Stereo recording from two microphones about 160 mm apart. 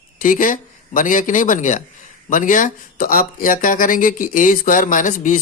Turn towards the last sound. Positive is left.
turn(degrees=55)  # may be behind; listen again after turning